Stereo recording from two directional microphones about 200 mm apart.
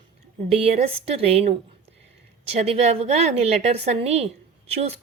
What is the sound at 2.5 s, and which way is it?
A woman's voice, 30° right (ahead or behind).